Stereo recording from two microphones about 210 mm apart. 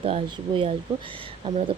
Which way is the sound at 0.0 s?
25° right (ahead or behind).